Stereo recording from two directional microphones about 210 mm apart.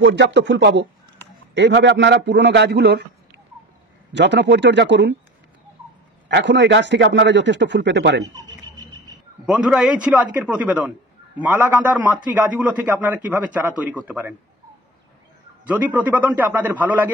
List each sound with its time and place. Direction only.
0.0 s a man's voice: 55° right (ahead or behind)
4.1 s a man's voice: 55° right (ahead or behind)
6.2 s a man's voice: 55° right (ahead or behind)
8.2 s a sound: 15° right (ahead or behind)
9.6 s a man's voice: 5° right (ahead or behind)
15.6 s a man's voice: 5° right (ahead or behind)